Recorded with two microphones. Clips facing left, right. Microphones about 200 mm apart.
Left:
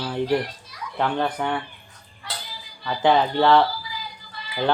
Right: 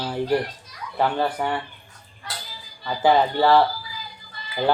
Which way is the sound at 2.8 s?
5° right (ahead or behind).